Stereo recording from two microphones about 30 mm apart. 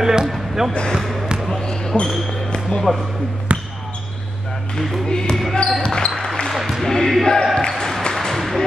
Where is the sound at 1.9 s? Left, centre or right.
Left.